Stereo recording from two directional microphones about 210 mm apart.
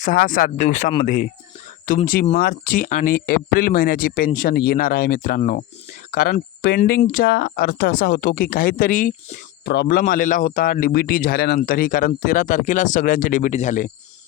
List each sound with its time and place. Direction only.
0.0 s speech: 40° left (ahead or behind)
9.6 s speech: 50° left (ahead or behind)
10.0 s speech: 40° left (ahead or behind)